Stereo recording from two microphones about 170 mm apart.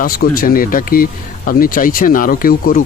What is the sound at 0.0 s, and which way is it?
Speech, 60° left (ahead or behind).